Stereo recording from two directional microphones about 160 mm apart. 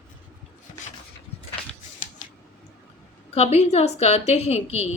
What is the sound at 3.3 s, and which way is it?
A woman's voice, 40° left (ahead or behind).